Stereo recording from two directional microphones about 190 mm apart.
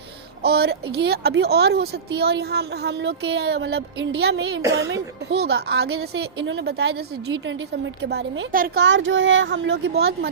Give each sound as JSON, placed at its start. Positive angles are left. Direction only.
{"t": 0.4, "sound": "speech", "side_deg": -60}
{"t": 8.8, "sound": "a woman's voice", "side_deg": -80}